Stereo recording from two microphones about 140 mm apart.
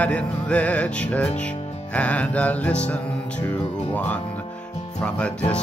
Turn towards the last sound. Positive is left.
turn(degrees=10)  # may be behind; listen again after turning